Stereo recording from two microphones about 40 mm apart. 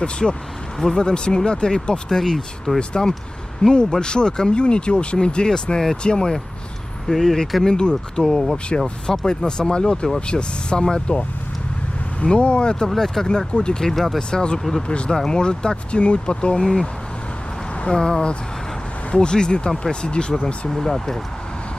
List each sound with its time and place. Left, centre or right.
0.0 s speech: left
7.1 s speech: centre
7.6 s speech: left
8.6 s speech: left
12.9 s speech: centre
13.5 s speech: left
13.9 s speech: centre
14.3 s speech: left
17.8 s speech: centre